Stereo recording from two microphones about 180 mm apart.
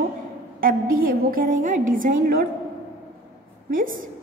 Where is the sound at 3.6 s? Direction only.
50° right (ahead or behind).